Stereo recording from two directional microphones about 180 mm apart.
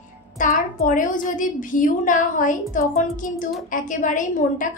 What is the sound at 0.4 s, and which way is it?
A woman's voice, 45° left (ahead or behind).